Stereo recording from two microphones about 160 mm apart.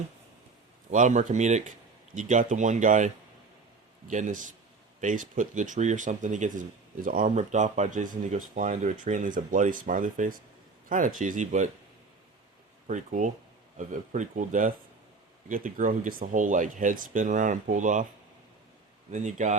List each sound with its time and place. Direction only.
0.9 s speech: 50° right (ahead or behind)
4.1 s speech: 50° right (ahead or behind)
12.9 s speech: 55° right (ahead or behind)
19.1 s speech: 50° right (ahead or behind)